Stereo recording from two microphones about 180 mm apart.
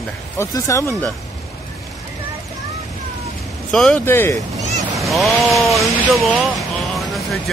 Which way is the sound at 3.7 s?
5° left (ahead or behind).